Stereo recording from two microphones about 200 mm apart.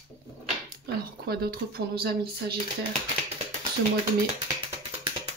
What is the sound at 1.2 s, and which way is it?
A woman's voice, 50° right (ahead or behind).